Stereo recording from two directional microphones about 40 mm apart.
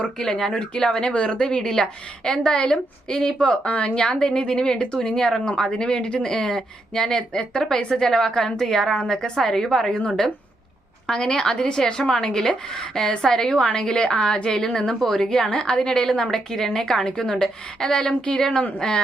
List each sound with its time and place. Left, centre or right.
0.0 s speech: centre